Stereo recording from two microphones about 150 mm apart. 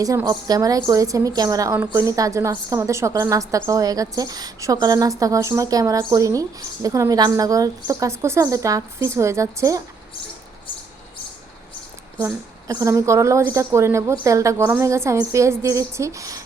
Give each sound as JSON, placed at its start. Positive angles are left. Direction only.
{"t": 0.0, "sound": "a woman's voice", "side_deg": -20}
{"t": 12.1, "sound": "a woman's voice", "side_deg": -20}